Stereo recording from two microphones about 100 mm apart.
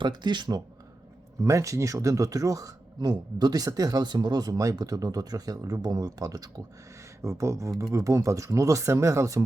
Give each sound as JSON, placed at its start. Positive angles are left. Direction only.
{"t": 0.0, "sound": "speech", "side_deg": -50}
{"t": 1.4, "sound": "speech", "side_deg": -30}